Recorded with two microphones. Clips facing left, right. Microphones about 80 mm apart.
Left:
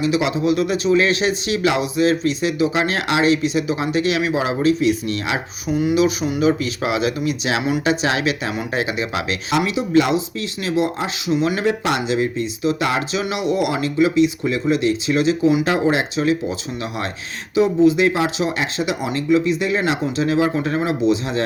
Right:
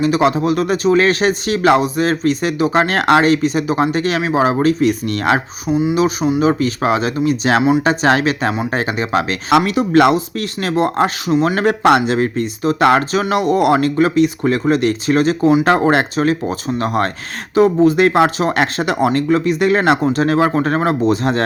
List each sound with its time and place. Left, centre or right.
0.0 s speech: right
5.7 s speech: right
9.5 s speech: right
11.3 s speech: right
11.6 s speech: right